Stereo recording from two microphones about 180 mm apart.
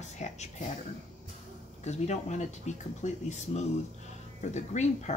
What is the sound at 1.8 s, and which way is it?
Speech, 40° left (ahead or behind).